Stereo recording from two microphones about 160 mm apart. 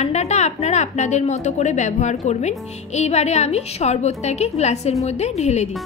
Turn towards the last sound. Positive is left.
turn(degrees=45)  # may be behind; listen again after turning